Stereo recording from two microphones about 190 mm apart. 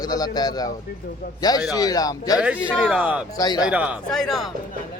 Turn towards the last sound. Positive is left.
turn(degrees=0)  # may be behind; listen again after turning